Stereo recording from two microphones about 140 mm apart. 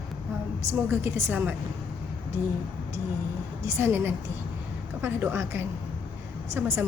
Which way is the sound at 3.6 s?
15° right (ahead or behind).